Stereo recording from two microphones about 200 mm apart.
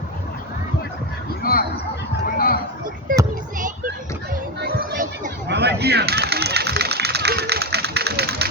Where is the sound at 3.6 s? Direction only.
40° right (ahead or behind).